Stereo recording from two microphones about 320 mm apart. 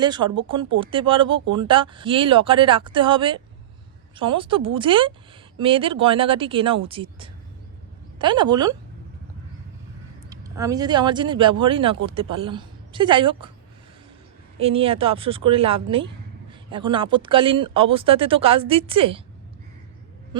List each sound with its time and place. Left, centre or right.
0.0 s speech: centre
10.2 s a woman's voice: centre
14.6 s speech: centre